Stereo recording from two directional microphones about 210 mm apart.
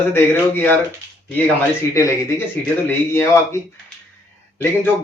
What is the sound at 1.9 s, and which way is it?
A man's voice, 15° left (ahead or behind).